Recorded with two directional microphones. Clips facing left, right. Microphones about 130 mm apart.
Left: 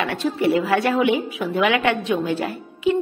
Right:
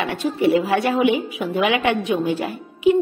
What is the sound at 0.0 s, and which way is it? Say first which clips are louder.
A woman's voice: right 1 dB; 20° right (ahead or behind).